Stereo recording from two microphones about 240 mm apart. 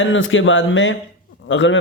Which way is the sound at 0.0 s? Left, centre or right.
Left.